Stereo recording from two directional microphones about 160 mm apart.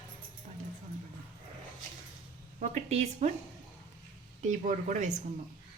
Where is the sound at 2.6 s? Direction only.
45° right (ahead or behind).